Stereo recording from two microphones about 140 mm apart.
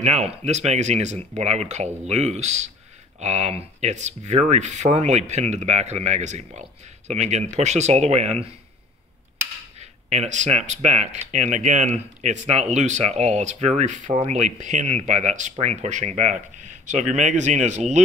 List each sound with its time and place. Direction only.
0.0 s speech: 50° right (ahead or behind)
9.8 s speech: 55° right (ahead or behind)